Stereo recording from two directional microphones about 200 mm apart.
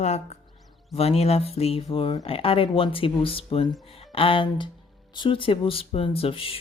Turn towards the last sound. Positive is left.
turn(degrees=25)  # may be behind; listen again after turning